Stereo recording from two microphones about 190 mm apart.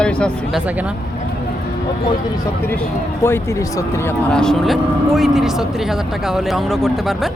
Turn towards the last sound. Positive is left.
turn(degrees=0)  # may be behind; listen again after turning